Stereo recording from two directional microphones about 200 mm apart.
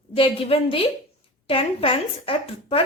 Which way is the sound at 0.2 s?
30° left (ahead or behind).